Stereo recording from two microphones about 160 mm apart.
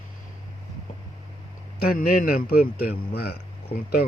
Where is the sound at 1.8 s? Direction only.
65° left (ahead or behind).